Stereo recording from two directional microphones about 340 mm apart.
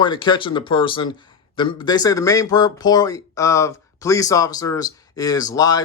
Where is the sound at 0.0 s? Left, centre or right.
Centre.